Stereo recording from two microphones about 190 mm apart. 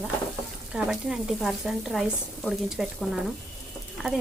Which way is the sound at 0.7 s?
5° right (ahead or behind).